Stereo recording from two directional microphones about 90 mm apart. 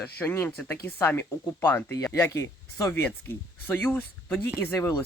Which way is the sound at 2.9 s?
25° left (ahead or behind).